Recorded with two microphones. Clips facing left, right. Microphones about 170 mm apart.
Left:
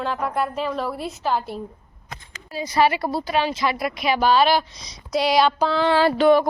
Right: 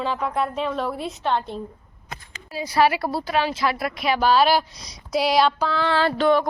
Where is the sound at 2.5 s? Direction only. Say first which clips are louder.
Even; 5° right (ahead or behind).